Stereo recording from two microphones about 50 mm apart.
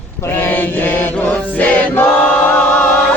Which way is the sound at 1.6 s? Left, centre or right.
Left.